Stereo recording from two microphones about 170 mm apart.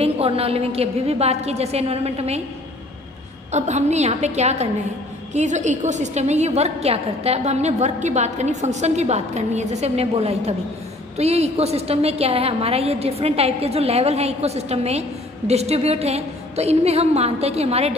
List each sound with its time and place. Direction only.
0.0 s a woman's voice: 35° right (ahead or behind)
3.5 s a woman's voice: 40° right (ahead or behind)